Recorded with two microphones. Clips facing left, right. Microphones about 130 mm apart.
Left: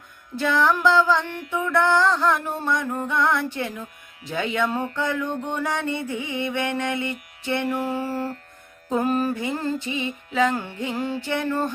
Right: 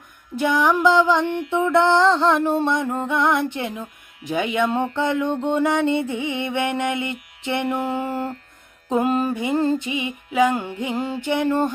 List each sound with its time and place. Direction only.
0.3 s music: 15° right (ahead or behind)